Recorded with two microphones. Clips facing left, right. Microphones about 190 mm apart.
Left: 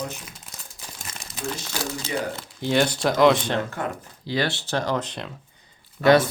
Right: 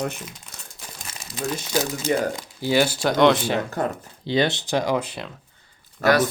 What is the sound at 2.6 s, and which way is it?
Speech, 5° right (ahead or behind).